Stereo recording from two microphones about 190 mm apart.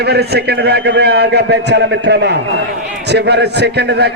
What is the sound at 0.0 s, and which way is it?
A man's voice, 60° right (ahead or behind).